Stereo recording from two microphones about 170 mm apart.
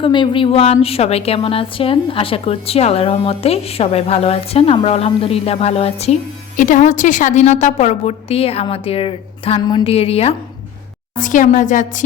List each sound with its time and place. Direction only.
0.0 s a woman's voice: 30° left (ahead or behind)
6.6 s a woman's voice: 50° left (ahead or behind)
11.2 s a woman's voice: 50° left (ahead or behind)